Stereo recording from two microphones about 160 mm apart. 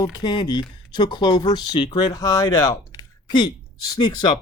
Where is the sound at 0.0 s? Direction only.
30° left (ahead or behind).